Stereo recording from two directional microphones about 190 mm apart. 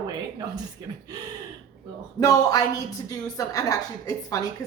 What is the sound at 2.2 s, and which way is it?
Speech, 20° left (ahead or behind).